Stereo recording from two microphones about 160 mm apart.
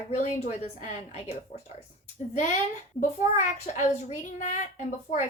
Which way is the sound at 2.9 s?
50° left (ahead or behind).